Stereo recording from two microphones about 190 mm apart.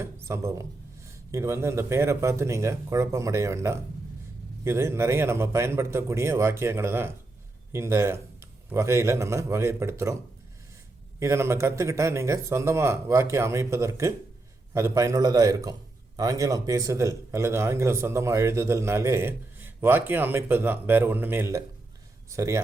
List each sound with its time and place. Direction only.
0.0 s speech: 15° right (ahead or behind)
11.2 s speech: 15° right (ahead or behind)